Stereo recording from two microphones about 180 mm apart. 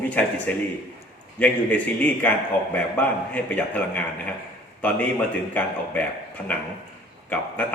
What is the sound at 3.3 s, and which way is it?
A man's voice, 10° left (ahead or behind).